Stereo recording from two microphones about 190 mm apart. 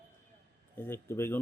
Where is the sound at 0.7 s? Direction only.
10° left (ahead or behind).